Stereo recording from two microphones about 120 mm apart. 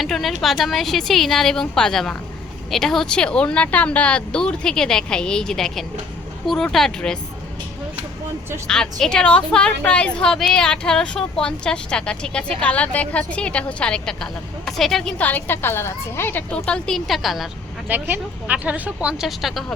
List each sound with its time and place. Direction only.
0.0 s a sound: centre (ahead or behind)
0.4 s a woman's voice: centre (ahead or behind)
8.6 s a woman's voice: 5° left (ahead or behind)
15.2 s a woman's voice: 15° left (ahead or behind)
16.6 s speech: 5° left (ahead or behind)
17.8 s speech: 15° right (ahead or behind)